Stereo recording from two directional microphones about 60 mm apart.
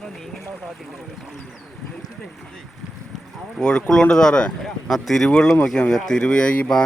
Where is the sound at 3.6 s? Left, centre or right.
Centre.